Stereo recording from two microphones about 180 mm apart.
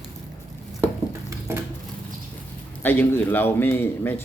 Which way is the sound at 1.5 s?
15° right (ahead or behind).